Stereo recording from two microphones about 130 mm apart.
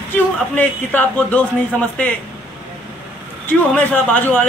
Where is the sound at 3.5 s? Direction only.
15° left (ahead or behind).